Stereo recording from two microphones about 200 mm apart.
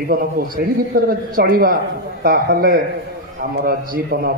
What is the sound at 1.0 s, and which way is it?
A man's voice, 45° right (ahead or behind).